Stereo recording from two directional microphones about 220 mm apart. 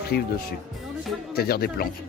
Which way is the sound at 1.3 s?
45° left (ahead or behind).